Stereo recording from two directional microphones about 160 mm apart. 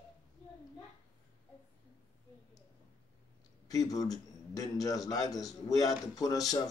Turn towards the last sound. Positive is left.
turn(degrees=20)  # may be behind; listen again after turning